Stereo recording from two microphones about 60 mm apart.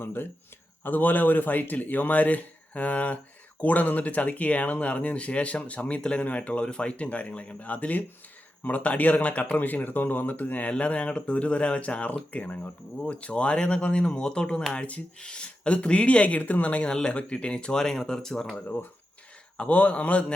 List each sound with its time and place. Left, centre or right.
0.0 s speech: left; by 18.5 s centre
19.5 s speech: left